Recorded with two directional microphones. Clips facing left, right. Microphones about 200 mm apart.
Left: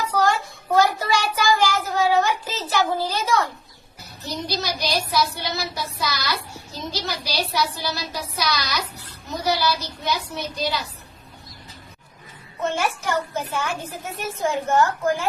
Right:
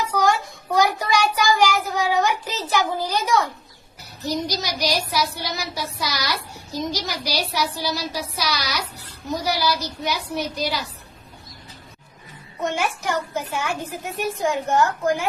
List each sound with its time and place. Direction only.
0.8 s child singing: 15° right (ahead or behind)
4.3 s a sound: 15° right (ahead or behind)
12.6 s a child's voice: 15° right (ahead or behind)